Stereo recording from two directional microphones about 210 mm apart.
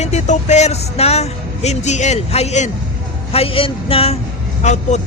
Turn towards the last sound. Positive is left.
turn(degrees=35)  # may be behind; listen again after turning